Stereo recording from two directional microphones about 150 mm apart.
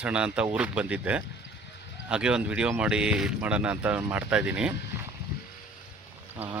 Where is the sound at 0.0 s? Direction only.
5° right (ahead or behind).